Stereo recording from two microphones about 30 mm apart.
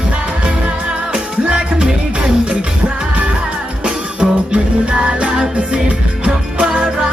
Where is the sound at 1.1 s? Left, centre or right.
Right.